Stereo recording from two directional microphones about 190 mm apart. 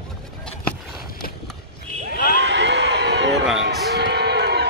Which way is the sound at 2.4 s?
65° right (ahead or behind).